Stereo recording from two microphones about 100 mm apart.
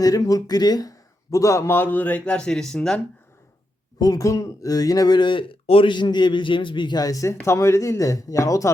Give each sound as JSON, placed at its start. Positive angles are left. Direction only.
{"t": 0.0, "sound": "speech", "side_deg": 35}
{"t": 3.9, "sound": "speech", "side_deg": 40}